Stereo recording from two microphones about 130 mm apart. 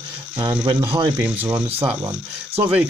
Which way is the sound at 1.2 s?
10° right (ahead or behind).